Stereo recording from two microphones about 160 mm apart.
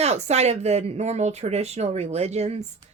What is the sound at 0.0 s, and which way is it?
A woman's voice, 45° right (ahead or behind).